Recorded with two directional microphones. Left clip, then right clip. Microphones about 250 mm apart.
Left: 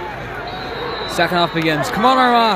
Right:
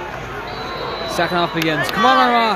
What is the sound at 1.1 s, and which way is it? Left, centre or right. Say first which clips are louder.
Speech: left 2 dB; centre.